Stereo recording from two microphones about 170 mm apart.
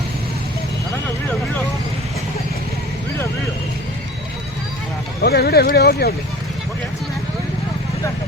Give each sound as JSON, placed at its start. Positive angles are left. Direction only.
{"t": 5.2, "sound": "speech", "side_deg": 70}